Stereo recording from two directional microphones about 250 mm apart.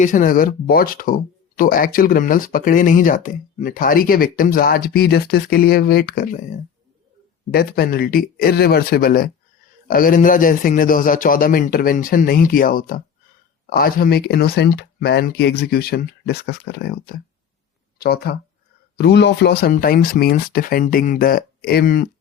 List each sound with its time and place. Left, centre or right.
0.0 s speech: left
7.5 s speech: left